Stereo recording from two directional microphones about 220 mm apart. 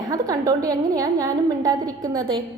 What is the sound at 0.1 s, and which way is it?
A woman's voice, 15° right (ahead or behind).